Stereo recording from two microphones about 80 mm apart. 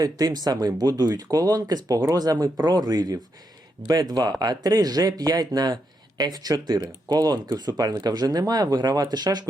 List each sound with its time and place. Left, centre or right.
0.0 s speech: right